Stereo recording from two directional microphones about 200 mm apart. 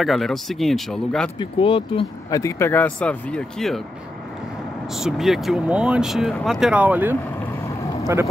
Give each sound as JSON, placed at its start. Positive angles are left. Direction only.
{"t": 0.0, "sound": "speech", "side_deg": 0}
{"t": 1.4, "sound": "speech", "side_deg": 25}
{"t": 2.4, "sound": "speech", "side_deg": 10}
{"t": 4.9, "sound": "speech", "side_deg": 0}